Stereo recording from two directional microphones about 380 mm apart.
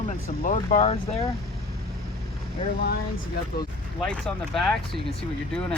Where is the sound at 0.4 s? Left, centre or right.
Centre.